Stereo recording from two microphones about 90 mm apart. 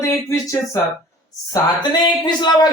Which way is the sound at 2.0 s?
55° left (ahead or behind).